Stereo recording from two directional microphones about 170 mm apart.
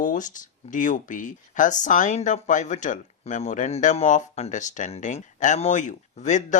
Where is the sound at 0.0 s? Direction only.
50° left (ahead or behind).